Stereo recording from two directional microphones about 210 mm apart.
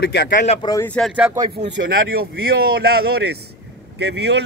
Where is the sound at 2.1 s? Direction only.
45° right (ahead or behind).